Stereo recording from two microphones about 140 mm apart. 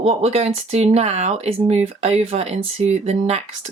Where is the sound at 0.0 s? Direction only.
50° right (ahead or behind).